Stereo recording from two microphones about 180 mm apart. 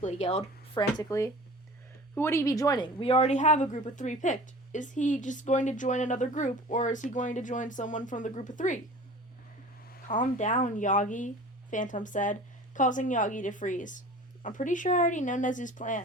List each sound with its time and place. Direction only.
0.0 s speech: 35° left (ahead or behind)
0.8 s a woman's voice: 20° left (ahead or behind); by 8.8 s 45° left (ahead or behind)
9.8 s a woman's voice: 50° left (ahead or behind)